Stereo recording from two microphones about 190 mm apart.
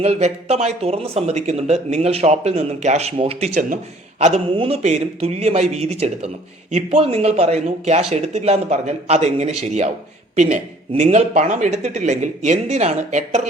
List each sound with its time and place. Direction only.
0.0 s a man's voice: 35° right (ahead or behind)